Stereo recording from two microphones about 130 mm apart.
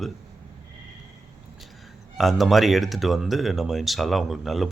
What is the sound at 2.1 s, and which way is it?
Speech, centre (ahead or behind).